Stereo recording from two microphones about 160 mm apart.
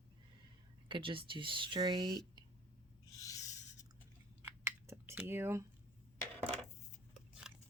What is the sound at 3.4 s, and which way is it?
Writing, 45° left (ahead or behind).